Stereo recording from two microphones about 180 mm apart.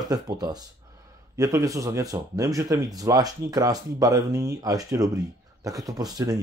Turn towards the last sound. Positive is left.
turn(degrees=-20)  # may be behind; listen again after turning